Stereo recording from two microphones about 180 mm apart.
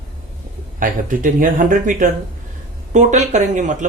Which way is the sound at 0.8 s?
50° right (ahead or behind).